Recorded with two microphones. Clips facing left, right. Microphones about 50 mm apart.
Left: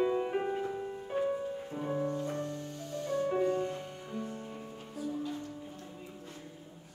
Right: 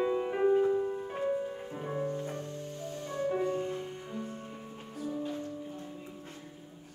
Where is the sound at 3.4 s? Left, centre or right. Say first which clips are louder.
Left 3 dB; centre.